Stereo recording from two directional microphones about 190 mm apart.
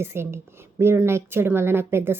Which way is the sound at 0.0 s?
15° right (ahead or behind).